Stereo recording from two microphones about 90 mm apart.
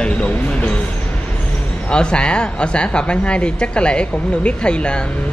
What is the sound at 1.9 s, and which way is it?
A woman's voice, 10° left (ahead or behind).